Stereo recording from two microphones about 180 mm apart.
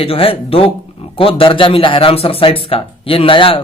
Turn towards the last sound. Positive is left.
turn(degrees=30)  # may be behind; listen again after turning